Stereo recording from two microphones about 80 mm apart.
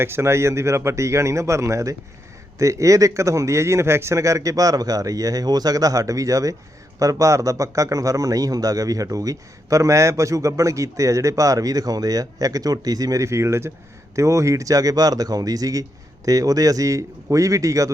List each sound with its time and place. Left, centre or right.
0.0 s a man's voice: right